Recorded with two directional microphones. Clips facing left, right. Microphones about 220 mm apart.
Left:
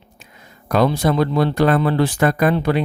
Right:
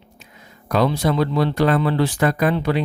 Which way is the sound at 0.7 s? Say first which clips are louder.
Left 2 dB; 50° left (ahead or behind).